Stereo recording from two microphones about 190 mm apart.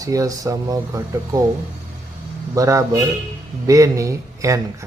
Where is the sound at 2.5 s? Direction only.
15° right (ahead or behind).